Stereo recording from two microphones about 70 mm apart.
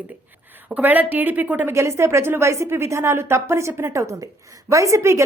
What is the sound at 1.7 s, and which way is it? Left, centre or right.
A woman's voice, right.